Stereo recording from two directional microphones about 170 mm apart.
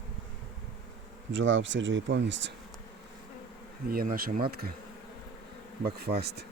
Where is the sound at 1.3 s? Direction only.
90° right.